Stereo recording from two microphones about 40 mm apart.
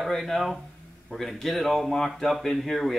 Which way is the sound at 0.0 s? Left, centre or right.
Centre.